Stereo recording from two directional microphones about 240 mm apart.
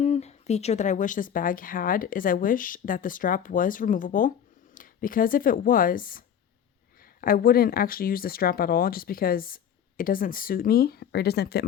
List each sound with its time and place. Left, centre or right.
0.0 s a woman's voice: left